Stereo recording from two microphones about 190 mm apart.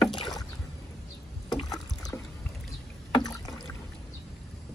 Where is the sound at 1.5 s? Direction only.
20° left (ahead or behind).